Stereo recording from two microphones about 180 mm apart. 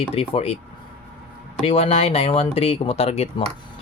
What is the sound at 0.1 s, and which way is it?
Speech, 35° left (ahead or behind).